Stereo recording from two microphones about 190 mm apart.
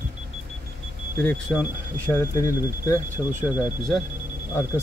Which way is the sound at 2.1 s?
15° left (ahead or behind).